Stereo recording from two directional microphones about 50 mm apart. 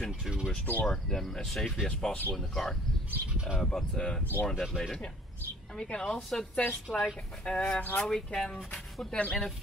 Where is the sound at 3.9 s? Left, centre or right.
Centre.